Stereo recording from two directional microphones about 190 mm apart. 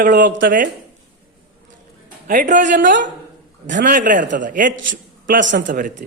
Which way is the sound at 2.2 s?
45° right (ahead or behind).